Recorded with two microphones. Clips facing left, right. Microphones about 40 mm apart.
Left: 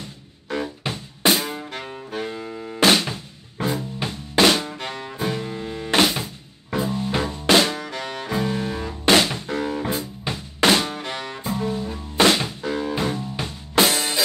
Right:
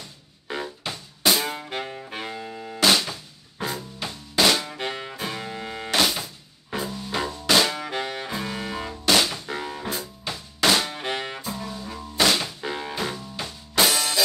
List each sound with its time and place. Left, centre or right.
0.6 s music: left
2.0 s music: right
2.3 s music: centre
2.8 s drum kit: left
4.7 s music: right
5.9 s music: left
7.8 s music: centre
8.5 s music: right
9.0 s drum kit: left
11.0 s music: right
11.4 s music: left
12.6 s music: centre
12.9 s music: left